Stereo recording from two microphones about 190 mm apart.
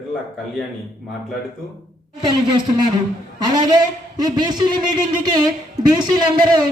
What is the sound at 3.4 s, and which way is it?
A man's voice, 20° right (ahead or behind).